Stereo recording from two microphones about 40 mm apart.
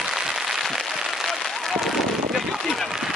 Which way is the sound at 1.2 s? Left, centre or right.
Centre.